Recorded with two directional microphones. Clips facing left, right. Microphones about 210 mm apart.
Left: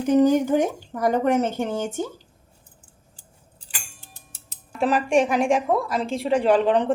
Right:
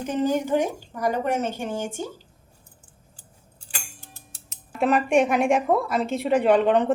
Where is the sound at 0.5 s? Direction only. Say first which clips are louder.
Left 2 dB; 50° left (ahead or behind).